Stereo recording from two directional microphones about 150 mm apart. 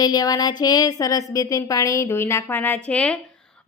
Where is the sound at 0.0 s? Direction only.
25° left (ahead or behind).